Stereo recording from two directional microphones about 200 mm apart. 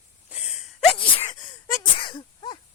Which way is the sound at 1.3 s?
20° left (ahead or behind).